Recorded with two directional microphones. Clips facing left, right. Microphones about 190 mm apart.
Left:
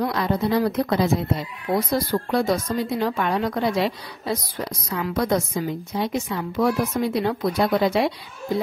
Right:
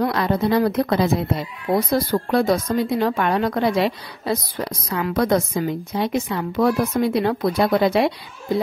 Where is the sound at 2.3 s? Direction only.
60° right (ahead or behind).